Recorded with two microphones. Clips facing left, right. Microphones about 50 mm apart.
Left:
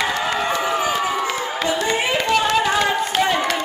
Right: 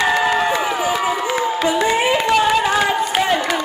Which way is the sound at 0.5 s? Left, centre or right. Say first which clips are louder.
Right 2 dB; centre.